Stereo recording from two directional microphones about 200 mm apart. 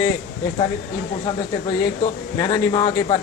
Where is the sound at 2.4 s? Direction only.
20° left (ahead or behind).